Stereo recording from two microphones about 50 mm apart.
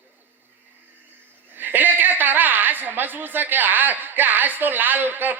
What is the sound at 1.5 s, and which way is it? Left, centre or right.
A woman's voice, right.